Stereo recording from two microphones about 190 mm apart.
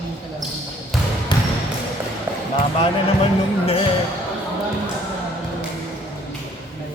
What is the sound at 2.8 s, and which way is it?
Speech, 30° left (ahead or behind).